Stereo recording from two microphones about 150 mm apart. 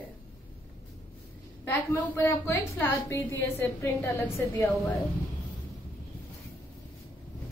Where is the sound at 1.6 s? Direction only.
15° left (ahead or behind).